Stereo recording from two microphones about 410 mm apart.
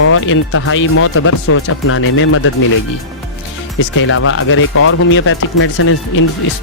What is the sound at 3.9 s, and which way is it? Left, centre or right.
A man's voice, left.